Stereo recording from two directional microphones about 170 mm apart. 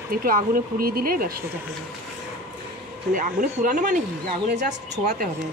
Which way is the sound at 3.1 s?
55° right (ahead or behind).